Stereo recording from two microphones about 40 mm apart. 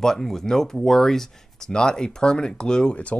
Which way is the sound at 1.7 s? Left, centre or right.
Centre.